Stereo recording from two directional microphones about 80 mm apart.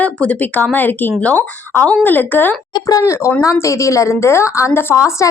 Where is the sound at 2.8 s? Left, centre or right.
Left.